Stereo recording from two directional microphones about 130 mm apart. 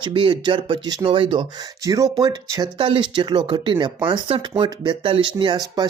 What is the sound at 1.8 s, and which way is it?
Speech, 25° right (ahead or behind).